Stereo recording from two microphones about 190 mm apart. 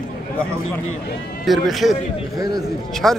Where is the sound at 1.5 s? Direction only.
Centre (ahead or behind).